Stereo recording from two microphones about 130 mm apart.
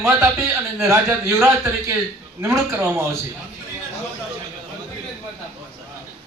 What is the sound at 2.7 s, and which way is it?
Speech, 20° right (ahead or behind).